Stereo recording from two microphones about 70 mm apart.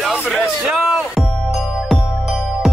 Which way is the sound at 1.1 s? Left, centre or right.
Centre.